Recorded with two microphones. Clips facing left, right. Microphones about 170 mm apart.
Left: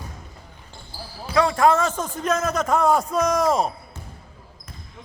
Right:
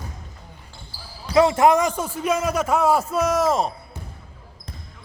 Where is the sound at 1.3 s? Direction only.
20° right (ahead or behind); by 3.7 s centre (ahead or behind).